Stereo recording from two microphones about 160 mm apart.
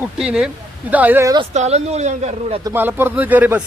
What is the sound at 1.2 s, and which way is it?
Speech, 25° right (ahead or behind).